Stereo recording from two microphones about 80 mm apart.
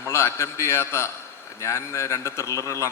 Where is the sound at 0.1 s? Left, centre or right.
Left.